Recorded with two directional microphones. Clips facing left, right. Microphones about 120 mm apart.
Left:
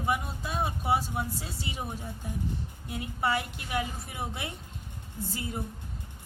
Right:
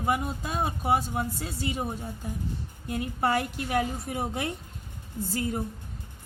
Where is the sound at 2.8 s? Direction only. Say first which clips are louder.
Right 3 dB; 45° right (ahead or behind).